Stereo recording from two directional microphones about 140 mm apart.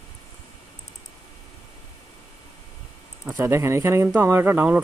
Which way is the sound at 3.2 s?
15° right (ahead or behind).